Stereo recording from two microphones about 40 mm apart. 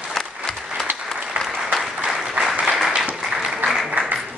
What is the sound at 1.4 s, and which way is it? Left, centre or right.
Applause, centre.